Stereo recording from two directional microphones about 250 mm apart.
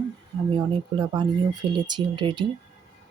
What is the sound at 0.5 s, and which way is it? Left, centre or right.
Speech, centre.